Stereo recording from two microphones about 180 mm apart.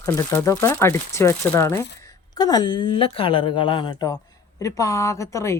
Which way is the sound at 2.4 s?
25° left (ahead or behind).